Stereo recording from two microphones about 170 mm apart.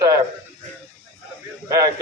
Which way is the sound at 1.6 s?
20° right (ahead or behind).